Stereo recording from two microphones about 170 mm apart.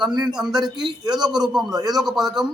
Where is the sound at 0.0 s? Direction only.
25° right (ahead or behind).